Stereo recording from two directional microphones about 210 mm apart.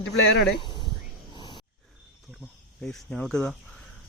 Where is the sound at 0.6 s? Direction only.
20° left (ahead or behind).